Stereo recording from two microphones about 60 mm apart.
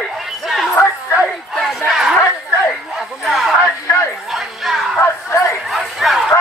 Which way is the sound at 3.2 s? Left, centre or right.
Centre.